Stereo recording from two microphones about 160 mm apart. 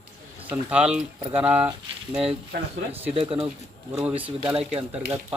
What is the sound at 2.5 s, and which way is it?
Speech, 90° right.